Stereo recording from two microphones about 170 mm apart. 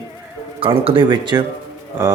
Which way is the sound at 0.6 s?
30° right (ahead or behind).